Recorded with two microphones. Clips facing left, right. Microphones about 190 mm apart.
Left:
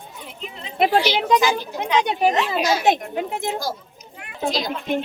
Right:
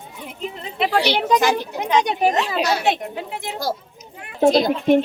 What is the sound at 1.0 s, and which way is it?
Speech, 65° right (ahead or behind).